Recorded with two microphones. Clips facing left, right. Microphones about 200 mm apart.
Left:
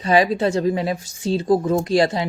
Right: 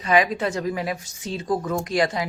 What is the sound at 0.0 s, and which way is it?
Speech, 30° left (ahead or behind).